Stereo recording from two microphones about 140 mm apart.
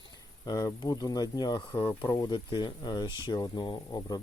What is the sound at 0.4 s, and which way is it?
Speech, 30° left (ahead or behind).